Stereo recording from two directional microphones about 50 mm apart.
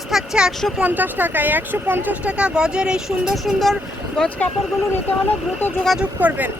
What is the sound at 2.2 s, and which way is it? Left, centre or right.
Speech, right.